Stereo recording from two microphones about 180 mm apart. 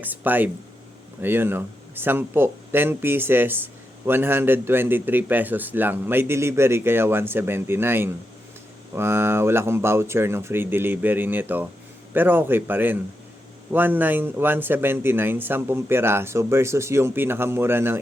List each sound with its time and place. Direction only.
0.0 s speech: 10° right (ahead or behind)